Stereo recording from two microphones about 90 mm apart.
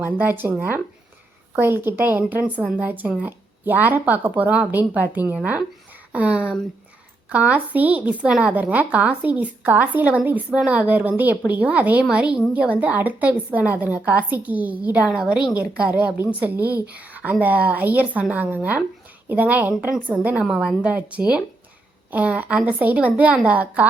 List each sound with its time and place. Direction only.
0.2 s a woman's voice: 20° right (ahead or behind)
1.5 s a woman's voice: 25° right (ahead or behind)
20.4 s a woman's voice: 10° right (ahead or behind)